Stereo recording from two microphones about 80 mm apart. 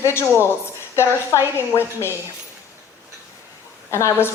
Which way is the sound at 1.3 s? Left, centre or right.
Right.